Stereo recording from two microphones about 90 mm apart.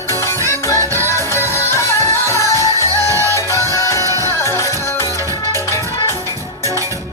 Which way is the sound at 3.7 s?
35° left (ahead or behind).